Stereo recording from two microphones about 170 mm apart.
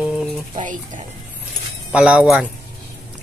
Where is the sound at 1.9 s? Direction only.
5° right (ahead or behind).